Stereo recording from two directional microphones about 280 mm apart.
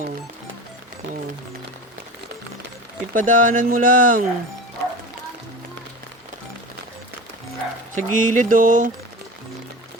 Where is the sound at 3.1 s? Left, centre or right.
Right.